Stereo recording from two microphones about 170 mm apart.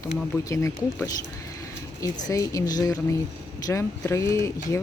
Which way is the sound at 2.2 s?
20° left (ahead or behind).